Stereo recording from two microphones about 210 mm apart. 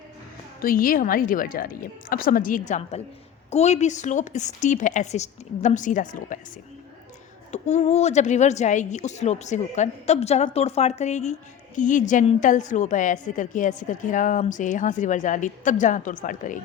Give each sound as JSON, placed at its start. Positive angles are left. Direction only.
{"t": 0.6, "sound": "a woman's voice", "side_deg": 40}
{"t": 7.5, "sound": "a woman's voice", "side_deg": 30}